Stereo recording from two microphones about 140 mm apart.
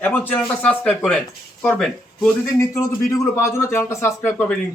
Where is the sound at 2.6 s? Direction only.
20° left (ahead or behind).